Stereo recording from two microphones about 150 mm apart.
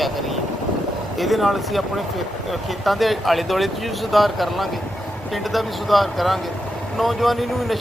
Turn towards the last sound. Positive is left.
turn(degrees=0)  # may be behind; listen again after turning